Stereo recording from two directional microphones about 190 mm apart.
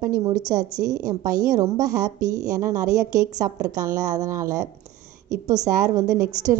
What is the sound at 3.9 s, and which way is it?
Speech, 20° right (ahead or behind).